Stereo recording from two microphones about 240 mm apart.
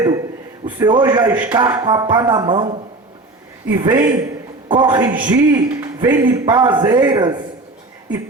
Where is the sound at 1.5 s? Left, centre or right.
Centre.